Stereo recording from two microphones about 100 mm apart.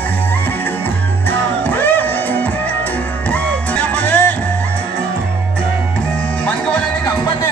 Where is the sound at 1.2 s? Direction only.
20° left (ahead or behind).